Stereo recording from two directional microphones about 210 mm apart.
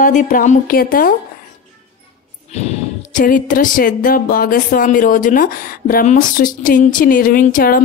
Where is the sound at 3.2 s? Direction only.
40° left (ahead or behind).